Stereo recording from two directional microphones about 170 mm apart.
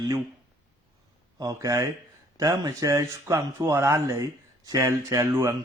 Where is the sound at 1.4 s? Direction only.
20° right (ahead or behind).